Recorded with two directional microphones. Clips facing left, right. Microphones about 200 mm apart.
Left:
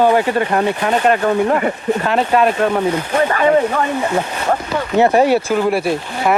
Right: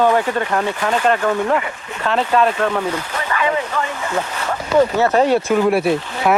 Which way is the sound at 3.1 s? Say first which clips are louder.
Left 9 dB; 45° left (ahead or behind).